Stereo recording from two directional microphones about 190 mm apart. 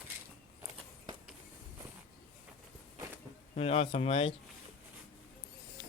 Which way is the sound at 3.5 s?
35° left (ahead or behind).